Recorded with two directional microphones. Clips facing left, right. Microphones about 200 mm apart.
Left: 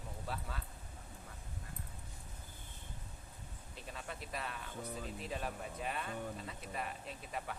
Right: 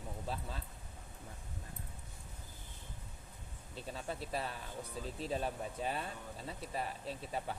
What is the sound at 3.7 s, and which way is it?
Speech, 30° right (ahead or behind).